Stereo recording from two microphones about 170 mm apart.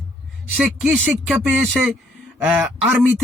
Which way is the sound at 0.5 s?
5° right (ahead or behind).